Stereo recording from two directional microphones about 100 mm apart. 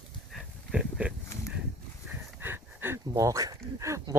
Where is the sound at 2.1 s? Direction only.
20° right (ahead or behind).